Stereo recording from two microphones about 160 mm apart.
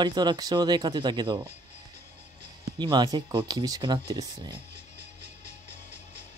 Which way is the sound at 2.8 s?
30° right (ahead or behind).